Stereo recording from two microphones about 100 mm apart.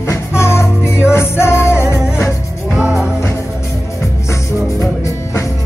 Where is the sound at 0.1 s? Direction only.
25° left (ahead or behind).